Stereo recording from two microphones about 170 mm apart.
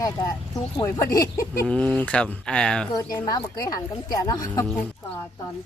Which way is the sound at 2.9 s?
20° left (ahead or behind).